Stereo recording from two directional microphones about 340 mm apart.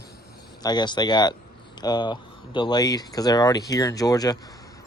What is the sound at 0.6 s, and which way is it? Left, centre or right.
Speech, centre.